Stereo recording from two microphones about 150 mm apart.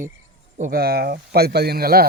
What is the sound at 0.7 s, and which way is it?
Speech, 90° right.